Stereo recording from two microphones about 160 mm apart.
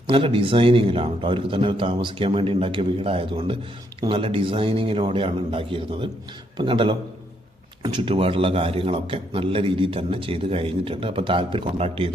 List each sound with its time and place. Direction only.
0.1 s a man's voice: 35° right (ahead or behind)